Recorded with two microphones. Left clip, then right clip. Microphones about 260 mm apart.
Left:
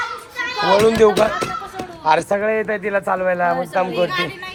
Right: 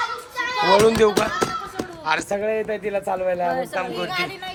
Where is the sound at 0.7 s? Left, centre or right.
Centre.